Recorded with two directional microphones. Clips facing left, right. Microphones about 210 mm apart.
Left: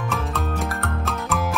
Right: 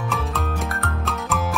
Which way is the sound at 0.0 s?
Centre (ahead or behind).